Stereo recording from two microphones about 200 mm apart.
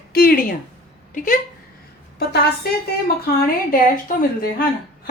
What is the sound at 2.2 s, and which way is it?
A woman's voice, 50° left (ahead or behind).